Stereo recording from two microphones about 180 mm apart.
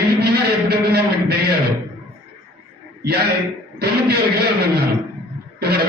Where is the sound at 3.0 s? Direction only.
60° right (ahead or behind).